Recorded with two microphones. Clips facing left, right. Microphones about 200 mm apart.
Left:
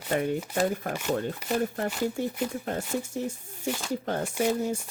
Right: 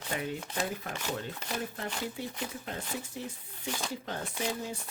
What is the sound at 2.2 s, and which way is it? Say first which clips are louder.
Speech: left 9 dB; 45° left (ahead or behind).